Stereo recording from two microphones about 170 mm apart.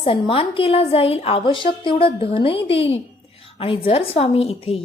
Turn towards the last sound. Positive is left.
turn(degrees=35)  # may be behind; listen again after turning